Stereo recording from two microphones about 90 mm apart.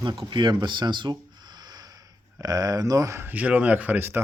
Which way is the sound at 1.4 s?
55° right (ahead or behind).